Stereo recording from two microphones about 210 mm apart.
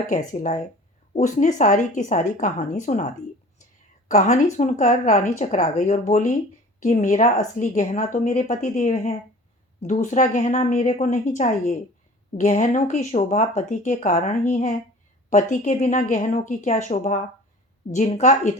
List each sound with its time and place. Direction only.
0.1 s a woman's voice: 35° left (ahead or behind)
4.1 s a woman's voice: 35° left (ahead or behind)